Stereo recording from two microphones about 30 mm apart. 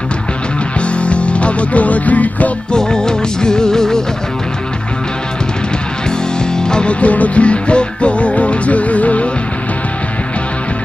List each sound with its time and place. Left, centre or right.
0.9 s music: left
2.7 s music: left
6.5 s music: left
6.9 s music: left